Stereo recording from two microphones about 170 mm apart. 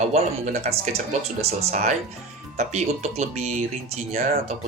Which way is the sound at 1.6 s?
45° right (ahead or behind).